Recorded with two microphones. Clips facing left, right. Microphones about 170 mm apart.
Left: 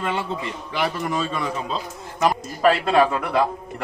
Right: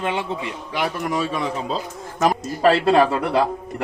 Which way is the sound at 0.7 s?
15° right (ahead or behind).